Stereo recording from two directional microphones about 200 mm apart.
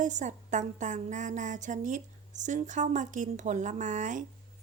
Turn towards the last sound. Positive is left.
turn(degrees=-40)  # may be behind; listen again after turning